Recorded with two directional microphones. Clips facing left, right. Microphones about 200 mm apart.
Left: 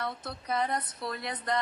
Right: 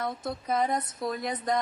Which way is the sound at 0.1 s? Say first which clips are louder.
Right 4 dB; 50° right (ahead or behind).